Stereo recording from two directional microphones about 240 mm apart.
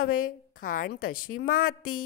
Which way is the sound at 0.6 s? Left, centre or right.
Left.